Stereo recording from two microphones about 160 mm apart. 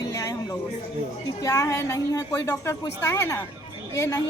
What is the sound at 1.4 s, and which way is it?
A woman's voice, 20° left (ahead or behind).